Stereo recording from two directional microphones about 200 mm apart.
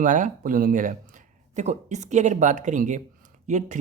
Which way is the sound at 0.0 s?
40° right (ahead or behind).